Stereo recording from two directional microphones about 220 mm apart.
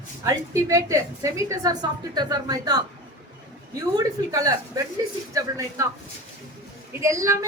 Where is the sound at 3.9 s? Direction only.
15° right (ahead or behind).